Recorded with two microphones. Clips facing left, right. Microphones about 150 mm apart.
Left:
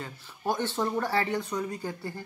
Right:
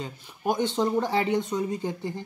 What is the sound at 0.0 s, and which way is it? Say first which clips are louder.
Speech: right 3 dB; 15° right (ahead or behind).